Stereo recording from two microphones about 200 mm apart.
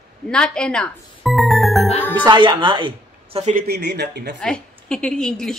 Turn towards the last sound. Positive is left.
turn(degrees=5)  # may be behind; listen again after turning